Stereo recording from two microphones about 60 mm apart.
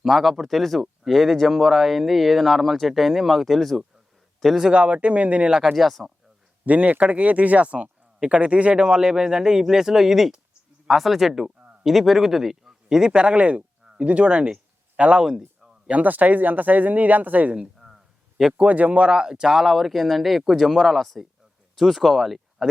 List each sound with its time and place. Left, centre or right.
0.0 s speech: centre
4.7 s speech: right
5.6 s speech: centre
6.7 s speech: right
15.3 s a sound: centre
15.9 s speech: right
17.7 s a sound: centre
18.5 s speech: right; by 22.7 s centre